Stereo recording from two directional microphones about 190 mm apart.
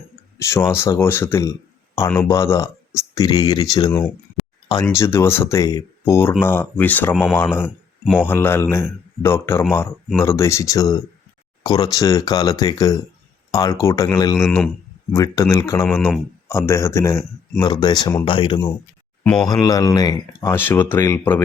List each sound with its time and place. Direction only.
0.3 s speech: 15° left (ahead or behind)
7.6 s speech: 5° right (ahead or behind)
8.2 s speech: 10° left (ahead or behind)
19.2 s speech: 5° left (ahead or behind)
19.5 s speech: 20° left (ahead or behind)